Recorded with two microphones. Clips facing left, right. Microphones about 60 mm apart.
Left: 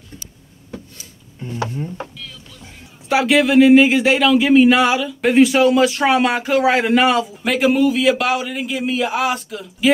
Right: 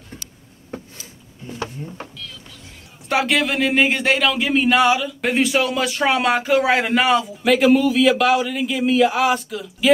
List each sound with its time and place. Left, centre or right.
1.6 s speech: left
3.1 s speech: centre